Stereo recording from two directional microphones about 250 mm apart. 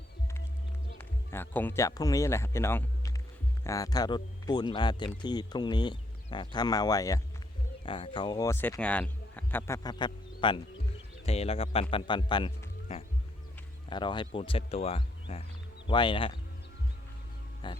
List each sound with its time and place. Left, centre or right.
0.9 s speech: centre
17.6 s speech: centre